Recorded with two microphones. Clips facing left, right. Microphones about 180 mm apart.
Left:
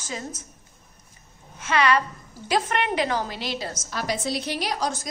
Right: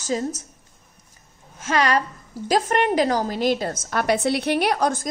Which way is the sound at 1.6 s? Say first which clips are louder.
Right 1 dB; 40° right (ahead or behind).